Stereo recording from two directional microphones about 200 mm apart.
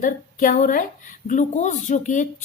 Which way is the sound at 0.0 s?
45° left (ahead or behind).